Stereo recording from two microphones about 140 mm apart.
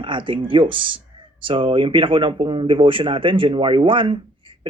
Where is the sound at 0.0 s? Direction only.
35° right (ahead or behind).